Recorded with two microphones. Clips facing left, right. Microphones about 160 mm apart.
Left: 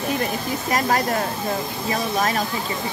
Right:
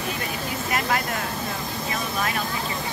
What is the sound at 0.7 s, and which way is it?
Speech, 40° left (ahead or behind).